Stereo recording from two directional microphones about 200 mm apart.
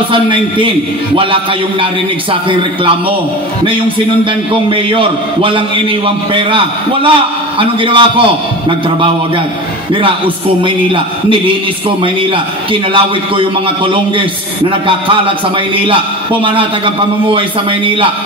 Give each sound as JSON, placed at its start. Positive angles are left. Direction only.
{"t": 0.1, "sound": "a man's voice", "side_deg": -25}
{"t": 4.3, "sound": "a man's voice", "side_deg": -25}
{"t": 10.6, "sound": "a man's voice", "side_deg": -25}